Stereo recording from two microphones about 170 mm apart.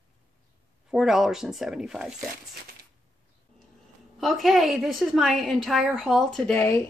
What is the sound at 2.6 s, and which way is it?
Crushing, 65° right (ahead or behind).